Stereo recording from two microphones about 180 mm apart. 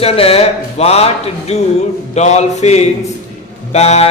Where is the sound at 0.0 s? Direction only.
35° left (ahead or behind).